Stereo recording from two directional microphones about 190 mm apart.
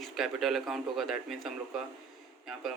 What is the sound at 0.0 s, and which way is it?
Speech, centre (ahead or behind).